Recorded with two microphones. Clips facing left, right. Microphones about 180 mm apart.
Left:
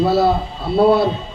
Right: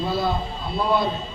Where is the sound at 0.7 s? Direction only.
65° left (ahead or behind).